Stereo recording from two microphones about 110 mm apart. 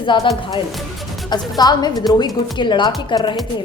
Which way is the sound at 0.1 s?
45° left (ahead or behind).